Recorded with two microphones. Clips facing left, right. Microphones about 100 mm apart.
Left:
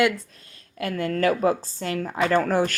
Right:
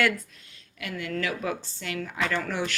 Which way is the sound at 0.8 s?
40° left (ahead or behind).